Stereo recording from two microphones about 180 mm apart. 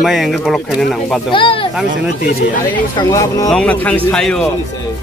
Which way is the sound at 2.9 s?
20° left (ahead or behind).